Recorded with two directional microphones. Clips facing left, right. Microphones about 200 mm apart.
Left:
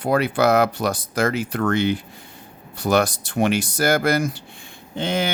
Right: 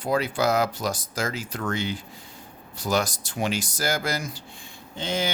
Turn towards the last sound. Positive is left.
turn(degrees=60)  # may be behind; listen again after turning